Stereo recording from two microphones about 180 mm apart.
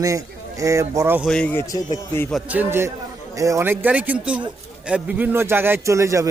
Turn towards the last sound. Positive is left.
turn(degrees=-15)  # may be behind; listen again after turning